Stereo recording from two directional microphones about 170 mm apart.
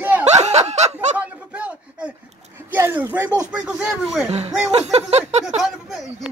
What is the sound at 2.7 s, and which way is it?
A man's voice, 10° right (ahead or behind).